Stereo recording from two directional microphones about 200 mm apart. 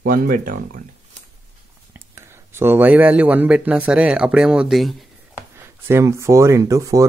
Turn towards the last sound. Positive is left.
turn(degrees=-15)  # may be behind; listen again after turning